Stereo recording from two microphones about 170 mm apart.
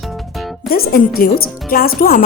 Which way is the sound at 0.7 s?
60° left (ahead or behind).